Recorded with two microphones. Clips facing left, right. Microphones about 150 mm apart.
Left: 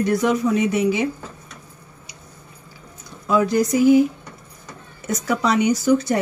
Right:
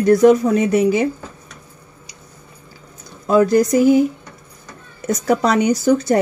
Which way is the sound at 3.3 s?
45° right (ahead or behind).